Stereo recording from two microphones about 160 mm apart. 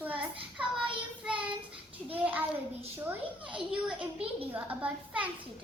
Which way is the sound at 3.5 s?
30° right (ahead or behind).